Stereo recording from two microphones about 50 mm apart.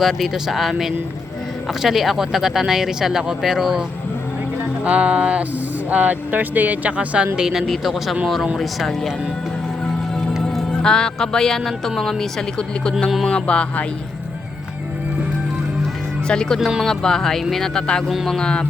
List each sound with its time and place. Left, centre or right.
0.0 s speech: centre
4.8 s speech: right
7.3 s speech: centre
10.4 s speech: centre
13.2 s music: left
16.2 s speech: centre